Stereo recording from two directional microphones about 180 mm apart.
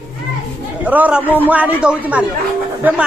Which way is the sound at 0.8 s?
10° right (ahead or behind).